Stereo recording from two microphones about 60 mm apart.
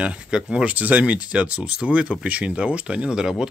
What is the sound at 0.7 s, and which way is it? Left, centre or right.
Speech, right.